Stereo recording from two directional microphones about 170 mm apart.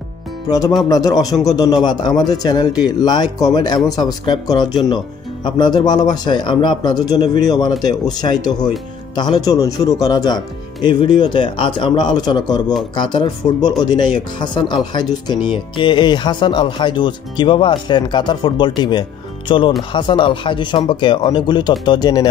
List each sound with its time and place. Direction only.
0.5 s speech: 20° left (ahead or behind)